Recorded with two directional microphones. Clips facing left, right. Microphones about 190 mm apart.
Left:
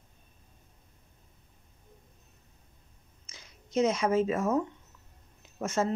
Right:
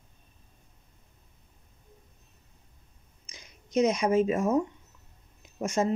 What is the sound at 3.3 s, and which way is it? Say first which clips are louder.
Speech: right 3 dB; 15° right (ahead or behind).